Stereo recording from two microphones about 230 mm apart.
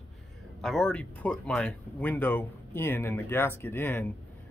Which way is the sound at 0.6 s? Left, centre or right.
Centre.